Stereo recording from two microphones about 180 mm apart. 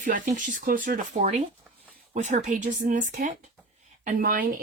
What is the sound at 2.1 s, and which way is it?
Speech, 40° right (ahead or behind).